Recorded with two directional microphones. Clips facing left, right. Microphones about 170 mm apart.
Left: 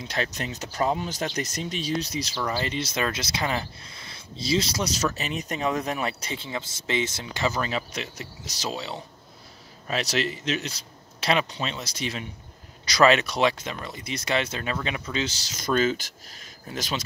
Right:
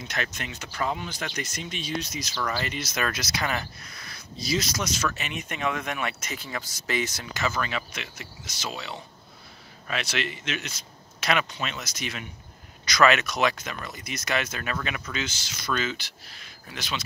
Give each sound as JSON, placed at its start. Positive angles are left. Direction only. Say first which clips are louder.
{"t": 0.0, "sound": "speech", "louder": "left 3 dB", "side_deg": 30}